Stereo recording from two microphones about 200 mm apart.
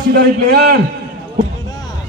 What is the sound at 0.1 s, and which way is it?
Speech, 55° right (ahead or behind).